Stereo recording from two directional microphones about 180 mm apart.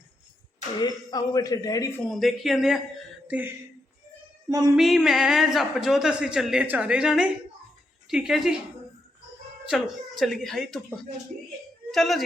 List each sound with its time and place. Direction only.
0.8 s speech: 25° left (ahead or behind)
2.0 s a man's voice: centre (ahead or behind)
3.2 s a sound: 10° right (ahead or behind)
4.4 s speech: 20° right (ahead or behind)
4.8 s a man's voice: centre (ahead or behind)
9.6 s a man's voice: centre (ahead or behind)